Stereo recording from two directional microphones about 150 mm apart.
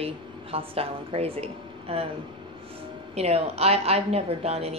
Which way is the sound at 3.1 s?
45° right (ahead or behind).